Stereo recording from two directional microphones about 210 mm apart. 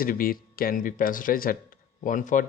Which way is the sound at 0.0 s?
40° left (ahead or behind).